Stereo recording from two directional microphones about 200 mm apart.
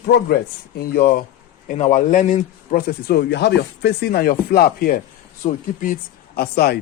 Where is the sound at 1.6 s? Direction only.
35° left (ahead or behind).